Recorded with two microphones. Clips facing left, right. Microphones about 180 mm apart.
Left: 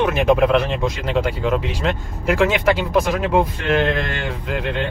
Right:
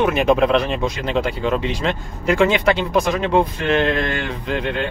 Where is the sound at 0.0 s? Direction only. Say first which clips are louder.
Even; centre (ahead or behind).